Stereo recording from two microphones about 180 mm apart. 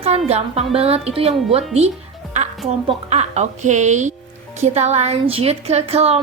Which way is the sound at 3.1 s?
40° right (ahead or behind).